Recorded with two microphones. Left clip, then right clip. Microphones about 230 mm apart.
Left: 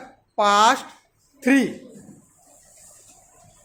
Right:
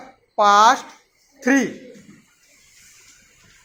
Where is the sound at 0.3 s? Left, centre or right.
Centre.